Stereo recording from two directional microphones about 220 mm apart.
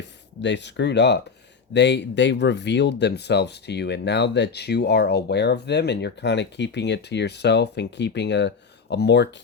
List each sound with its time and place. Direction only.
0.4 s speech: 50° left (ahead or behind)